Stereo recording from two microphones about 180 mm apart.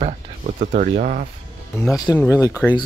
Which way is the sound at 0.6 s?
45° right (ahead or behind).